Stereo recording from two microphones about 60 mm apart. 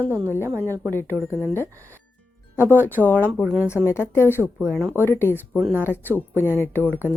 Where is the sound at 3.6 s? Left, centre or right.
Left.